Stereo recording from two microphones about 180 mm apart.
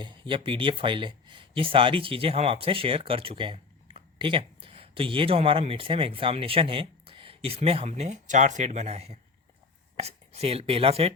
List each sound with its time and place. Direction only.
0.0 s speech: 25° right (ahead or behind)